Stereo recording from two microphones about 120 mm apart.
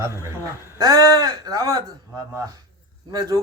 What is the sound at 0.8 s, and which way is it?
Speech, 30° right (ahead or behind).